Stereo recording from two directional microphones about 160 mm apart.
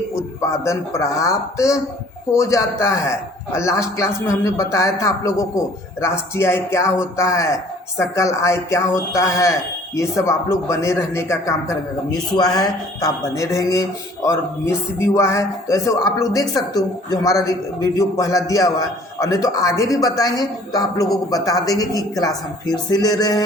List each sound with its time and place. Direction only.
0.6 s a man's voice: 20° left (ahead or behind)